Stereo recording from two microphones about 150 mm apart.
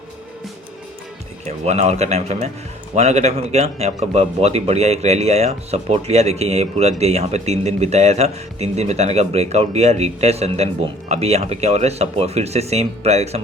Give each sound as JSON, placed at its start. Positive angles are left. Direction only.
{"t": 1.5, "sound": "speech", "side_deg": -45}